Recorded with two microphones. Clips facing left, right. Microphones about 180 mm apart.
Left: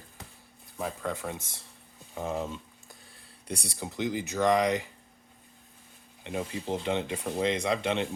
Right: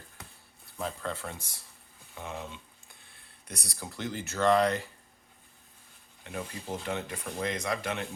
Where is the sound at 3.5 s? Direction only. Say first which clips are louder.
Left 6 dB; 25° left (ahead or behind).